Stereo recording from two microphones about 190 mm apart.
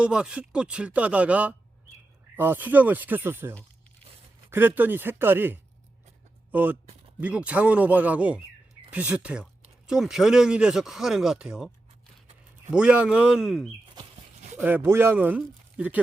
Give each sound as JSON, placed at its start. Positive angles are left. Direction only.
{"t": 0.0, "sound": "speech", "side_deg": -5}
{"t": 4.5, "sound": "speech", "side_deg": -10}
{"t": 12.7, "sound": "speech", "side_deg": -5}
{"t": 13.8, "sound": "a sound", "side_deg": -25}
{"t": 14.6, "sound": "speech", "side_deg": -10}